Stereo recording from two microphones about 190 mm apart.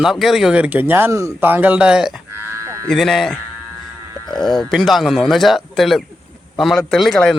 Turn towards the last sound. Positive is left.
turn(degrees=0)  # may be behind; listen again after turning